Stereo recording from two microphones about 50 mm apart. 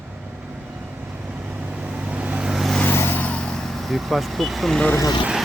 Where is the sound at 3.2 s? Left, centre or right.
Left.